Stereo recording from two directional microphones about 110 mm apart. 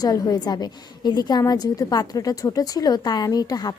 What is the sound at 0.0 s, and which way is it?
A woman's voice, 35° left (ahead or behind).